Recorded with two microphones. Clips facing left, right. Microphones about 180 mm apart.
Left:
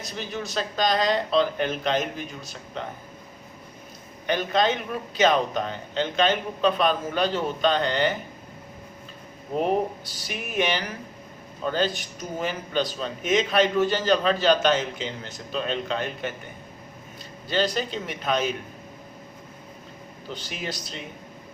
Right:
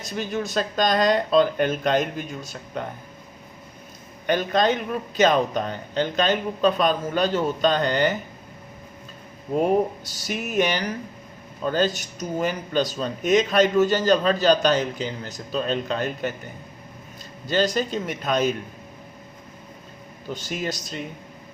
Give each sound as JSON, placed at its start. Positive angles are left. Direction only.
{"t": 0.2, "sound": "speech", "side_deg": -45}
{"t": 4.3, "sound": "speech", "side_deg": -45}
{"t": 10.0, "sound": "speech", "side_deg": -45}
{"t": 17.5, "sound": "speech", "side_deg": -45}
{"t": 20.3, "sound": "speech", "side_deg": -45}